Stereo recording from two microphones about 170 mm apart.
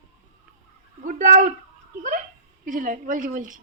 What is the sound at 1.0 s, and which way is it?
Speech, 50° right (ahead or behind).